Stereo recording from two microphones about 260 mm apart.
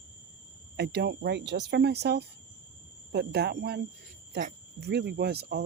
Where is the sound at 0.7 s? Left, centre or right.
Right.